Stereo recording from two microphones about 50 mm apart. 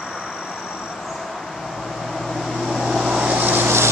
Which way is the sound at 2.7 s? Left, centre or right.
Centre.